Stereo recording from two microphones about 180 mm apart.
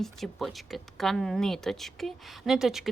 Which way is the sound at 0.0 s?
Centre (ahead or behind).